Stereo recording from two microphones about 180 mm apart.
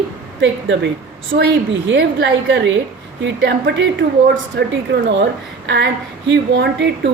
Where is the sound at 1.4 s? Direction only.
70° right (ahead or behind).